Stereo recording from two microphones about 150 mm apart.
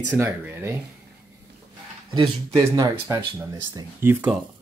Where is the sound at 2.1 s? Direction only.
25° right (ahead or behind).